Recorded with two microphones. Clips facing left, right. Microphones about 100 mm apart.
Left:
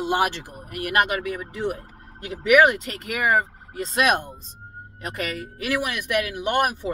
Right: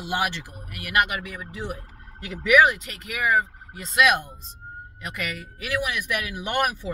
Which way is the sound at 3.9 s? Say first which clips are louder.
Right 1 dB; 40° left (ahead or behind).